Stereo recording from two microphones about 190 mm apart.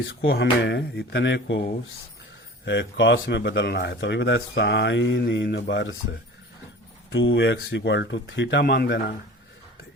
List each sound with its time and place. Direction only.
0.1 s speech: 80° left
0.6 s speech: 65° left (ahead or behind)
2.6 s speech: 65° left (ahead or behind)
7.1 s speech: 70° left (ahead or behind); by 9.1 s 55° left (ahead or behind)